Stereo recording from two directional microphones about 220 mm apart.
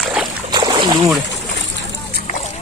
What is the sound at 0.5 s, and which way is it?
Splash, 20° right (ahead or behind).